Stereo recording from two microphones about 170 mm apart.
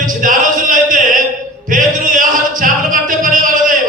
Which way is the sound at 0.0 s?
50° right (ahead or behind).